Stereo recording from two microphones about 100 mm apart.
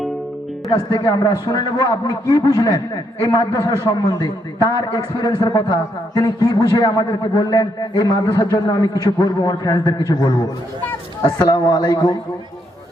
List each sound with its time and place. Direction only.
0.7 s a man's voice: 40° left (ahead or behind)